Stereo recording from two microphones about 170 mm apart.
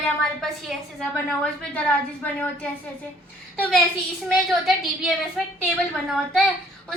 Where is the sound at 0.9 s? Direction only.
10° left (ahead or behind).